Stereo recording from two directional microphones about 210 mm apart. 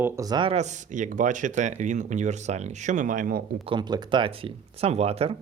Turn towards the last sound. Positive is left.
turn(degrees=-30)  # may be behind; listen again after turning